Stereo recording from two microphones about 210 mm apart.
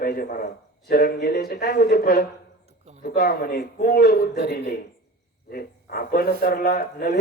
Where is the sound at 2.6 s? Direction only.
30° right (ahead or behind).